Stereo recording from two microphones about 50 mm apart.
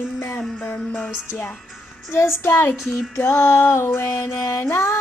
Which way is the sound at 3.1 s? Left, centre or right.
Left.